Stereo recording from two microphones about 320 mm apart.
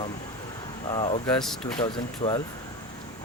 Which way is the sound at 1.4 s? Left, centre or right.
Centre.